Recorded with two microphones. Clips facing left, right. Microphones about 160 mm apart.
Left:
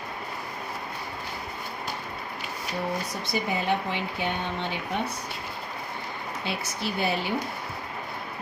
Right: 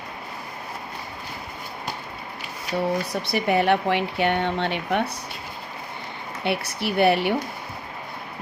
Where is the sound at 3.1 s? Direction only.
65° right (ahead or behind).